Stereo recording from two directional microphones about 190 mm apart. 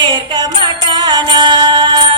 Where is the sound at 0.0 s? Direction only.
25° right (ahead or behind).